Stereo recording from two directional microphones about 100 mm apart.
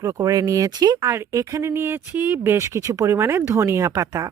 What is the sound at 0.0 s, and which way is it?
Speech, 35° right (ahead or behind).